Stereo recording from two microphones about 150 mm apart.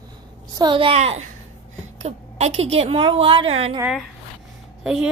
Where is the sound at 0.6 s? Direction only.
35° right (ahead or behind).